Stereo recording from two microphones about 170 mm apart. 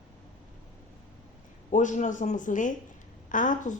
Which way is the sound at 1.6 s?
45° left (ahead or behind).